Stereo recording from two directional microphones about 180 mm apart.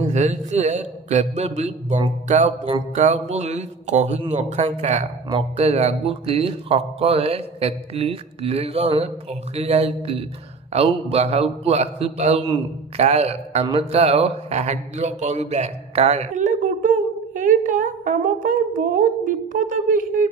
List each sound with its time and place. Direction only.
0.1 s speech: 40° right (ahead or behind)